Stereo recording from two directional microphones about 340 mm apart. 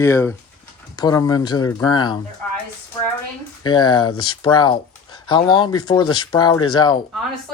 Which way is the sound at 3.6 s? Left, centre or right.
Centre.